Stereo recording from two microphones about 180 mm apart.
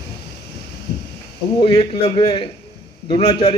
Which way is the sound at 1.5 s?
30° left (ahead or behind).